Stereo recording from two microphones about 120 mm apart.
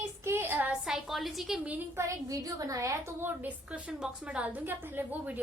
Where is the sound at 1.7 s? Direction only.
20° right (ahead or behind).